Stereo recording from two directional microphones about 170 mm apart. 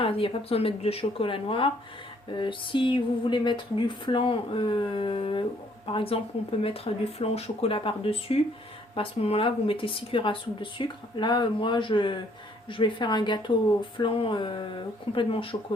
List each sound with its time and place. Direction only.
0.0 s speech: 30° left (ahead or behind)